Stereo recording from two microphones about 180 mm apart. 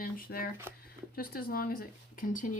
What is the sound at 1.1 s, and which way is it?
Speech, 55° left (ahead or behind).